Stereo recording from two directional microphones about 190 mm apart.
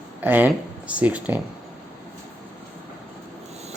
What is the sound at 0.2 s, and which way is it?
Speech, 10° right (ahead or behind).